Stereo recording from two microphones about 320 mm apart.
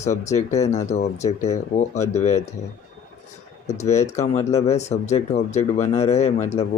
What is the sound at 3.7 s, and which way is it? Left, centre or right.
Speech, left.